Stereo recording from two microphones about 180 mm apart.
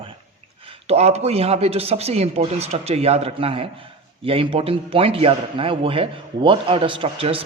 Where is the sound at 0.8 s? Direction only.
35° right (ahead or behind).